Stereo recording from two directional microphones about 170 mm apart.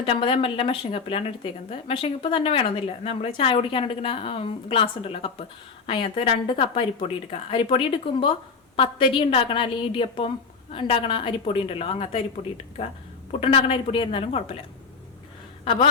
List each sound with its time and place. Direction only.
0.0 s a woman's voice: 30° left (ahead or behind)
15.6 s a woman's voice: 30° left (ahead or behind)